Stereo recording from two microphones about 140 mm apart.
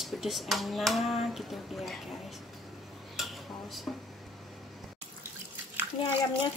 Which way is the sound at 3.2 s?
Centre (ahead or behind).